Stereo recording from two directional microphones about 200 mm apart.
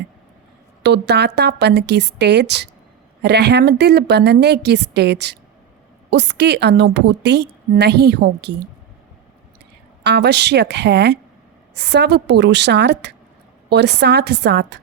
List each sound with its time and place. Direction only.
0.8 s a woman's voice: 55° right (ahead or behind)
10.0 s a woman's voice: 55° right (ahead or behind)